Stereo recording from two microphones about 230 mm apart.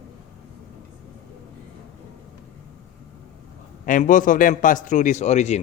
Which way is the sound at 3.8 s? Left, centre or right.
Left.